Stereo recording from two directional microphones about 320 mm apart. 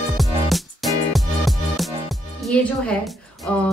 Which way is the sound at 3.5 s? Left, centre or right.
Centre.